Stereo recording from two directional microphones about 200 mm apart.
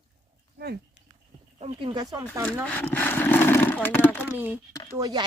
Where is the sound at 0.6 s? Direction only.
55° right (ahead or behind).